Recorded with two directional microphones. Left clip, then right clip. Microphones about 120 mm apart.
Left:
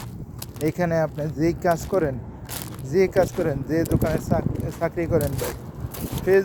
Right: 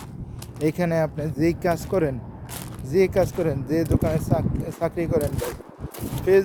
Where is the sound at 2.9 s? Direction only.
50° right (ahead or behind).